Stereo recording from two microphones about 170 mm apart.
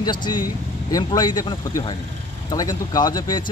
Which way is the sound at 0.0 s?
25° left (ahead or behind).